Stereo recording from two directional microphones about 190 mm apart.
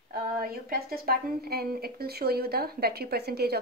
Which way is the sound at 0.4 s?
50° right (ahead or behind).